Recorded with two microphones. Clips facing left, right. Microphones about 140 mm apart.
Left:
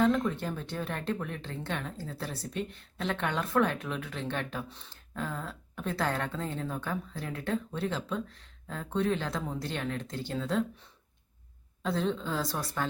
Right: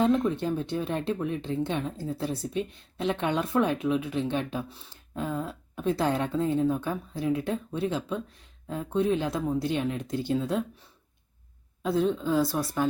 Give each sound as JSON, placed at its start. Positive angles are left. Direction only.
{"t": 0.0, "sound": "speech", "side_deg": -20}
{"t": 11.8, "sound": "speech", "side_deg": -10}